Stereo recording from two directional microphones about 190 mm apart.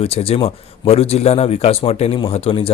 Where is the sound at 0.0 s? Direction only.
30° left (ahead or behind).